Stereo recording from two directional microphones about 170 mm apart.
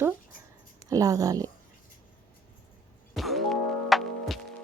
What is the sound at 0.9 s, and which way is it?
Speech, 20° right (ahead or behind).